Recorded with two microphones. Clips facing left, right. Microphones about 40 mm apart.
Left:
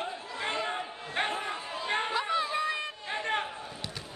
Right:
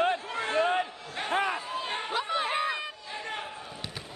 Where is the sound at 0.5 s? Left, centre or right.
Right.